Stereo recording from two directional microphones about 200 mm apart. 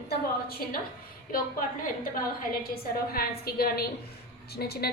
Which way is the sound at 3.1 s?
50° left (ahead or behind).